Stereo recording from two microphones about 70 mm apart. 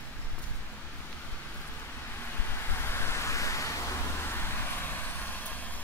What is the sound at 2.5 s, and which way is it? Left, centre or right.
Vehicle, left.